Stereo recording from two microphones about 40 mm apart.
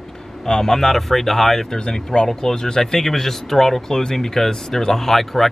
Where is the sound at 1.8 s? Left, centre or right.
Centre.